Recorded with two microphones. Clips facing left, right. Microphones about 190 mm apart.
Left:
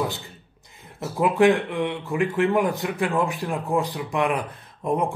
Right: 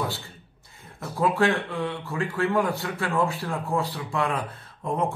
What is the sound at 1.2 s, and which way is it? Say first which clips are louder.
Speech: left 5 dB; 20° left (ahead or behind).